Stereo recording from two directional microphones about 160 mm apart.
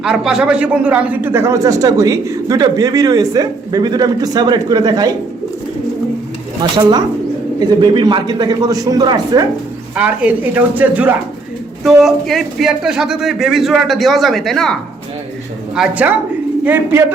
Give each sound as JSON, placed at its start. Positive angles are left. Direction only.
{"t": 0.0, "sound": "a man's voice", "side_deg": -5}
{"t": 6.6, "sound": "a man's voice", "side_deg": -25}
{"t": 9.9, "sound": "a woman's voice", "side_deg": -10}